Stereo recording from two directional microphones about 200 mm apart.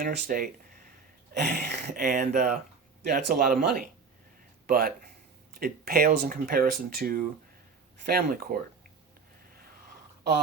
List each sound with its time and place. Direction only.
0.0 s speech: 45° right (ahead or behind)
1.3 s a sound: 55° right (ahead or behind)
2.0 s speech: 40° right (ahead or behind)